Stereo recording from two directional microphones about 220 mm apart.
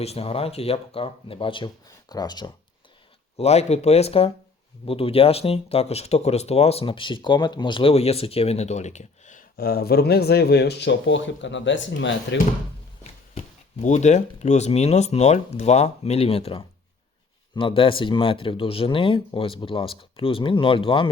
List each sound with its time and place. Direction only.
0.0 s speech: 25° left (ahead or behind)
3.3 s speech: 30° left (ahead or behind); by 12.4 s 55° left (ahead or behind)
13.8 s speech: 30° left (ahead or behind)